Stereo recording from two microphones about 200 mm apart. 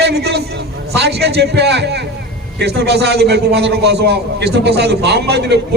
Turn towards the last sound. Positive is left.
turn(degrees=-55)  # may be behind; listen again after turning